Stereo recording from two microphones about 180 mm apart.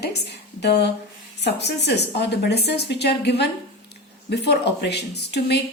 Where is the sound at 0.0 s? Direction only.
70° left (ahead or behind).